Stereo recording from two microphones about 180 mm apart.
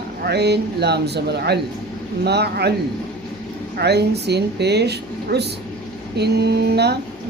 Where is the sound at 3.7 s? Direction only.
65° right (ahead or behind).